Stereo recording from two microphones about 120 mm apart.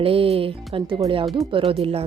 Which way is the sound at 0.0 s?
50° right (ahead or behind).